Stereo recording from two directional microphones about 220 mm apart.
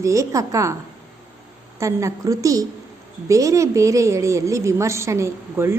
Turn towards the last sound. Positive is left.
turn(degrees=-10)  # may be behind; listen again after turning